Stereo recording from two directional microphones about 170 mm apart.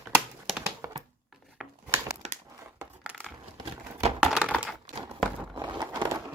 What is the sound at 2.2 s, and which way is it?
Crumpling, 40° right (ahead or behind).